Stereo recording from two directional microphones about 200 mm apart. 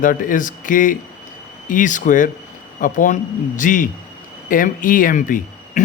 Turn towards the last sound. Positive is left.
turn(degrees=40)  # may be behind; listen again after turning